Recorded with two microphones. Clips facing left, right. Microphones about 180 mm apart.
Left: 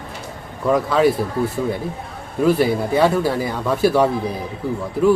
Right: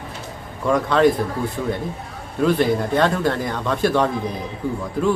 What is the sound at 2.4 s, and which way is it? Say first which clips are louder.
Speech: left 1 dB; 5° left (ahead or behind).